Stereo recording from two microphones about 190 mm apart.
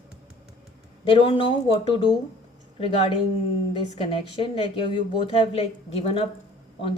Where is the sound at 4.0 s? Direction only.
25° left (ahead or behind).